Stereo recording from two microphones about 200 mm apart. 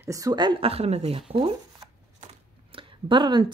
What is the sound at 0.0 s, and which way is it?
Speech, 15° right (ahead or behind).